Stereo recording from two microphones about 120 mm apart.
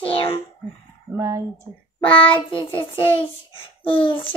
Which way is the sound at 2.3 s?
45° left (ahead or behind).